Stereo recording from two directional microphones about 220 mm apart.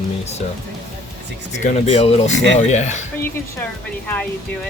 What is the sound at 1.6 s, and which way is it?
Speech, 30° left (ahead or behind).